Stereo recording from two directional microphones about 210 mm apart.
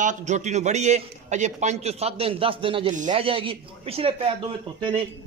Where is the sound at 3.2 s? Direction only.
25° right (ahead or behind).